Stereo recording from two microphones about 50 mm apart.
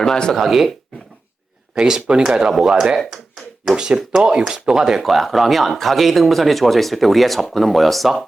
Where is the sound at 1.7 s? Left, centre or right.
Centre.